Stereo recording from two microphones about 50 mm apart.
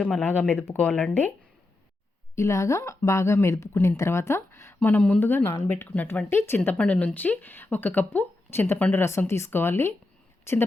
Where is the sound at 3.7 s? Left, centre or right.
Left.